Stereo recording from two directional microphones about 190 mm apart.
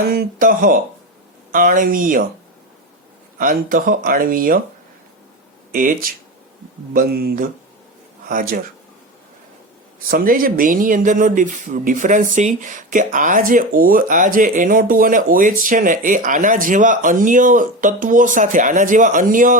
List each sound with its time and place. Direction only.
0.0 s speech: 50° right (ahead or behind)
3.3 s speech: 45° right (ahead or behind)
5.7 s speech: 45° right (ahead or behind)
10.1 s speech: 50° right (ahead or behind)